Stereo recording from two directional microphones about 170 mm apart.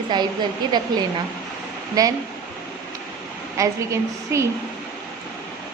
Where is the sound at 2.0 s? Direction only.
20° right (ahead or behind).